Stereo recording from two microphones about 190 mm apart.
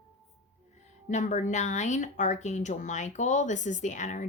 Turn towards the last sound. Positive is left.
turn(degrees=40)  # may be behind; listen again after turning